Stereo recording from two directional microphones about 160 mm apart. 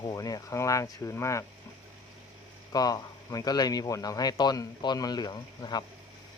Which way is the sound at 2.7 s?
25° left (ahead or behind).